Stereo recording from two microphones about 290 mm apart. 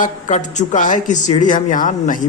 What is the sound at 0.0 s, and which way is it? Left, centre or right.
Speech, left.